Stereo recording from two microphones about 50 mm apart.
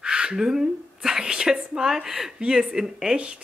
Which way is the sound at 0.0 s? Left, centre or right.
Centre.